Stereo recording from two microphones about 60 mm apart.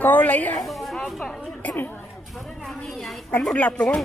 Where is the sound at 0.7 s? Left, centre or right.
Centre.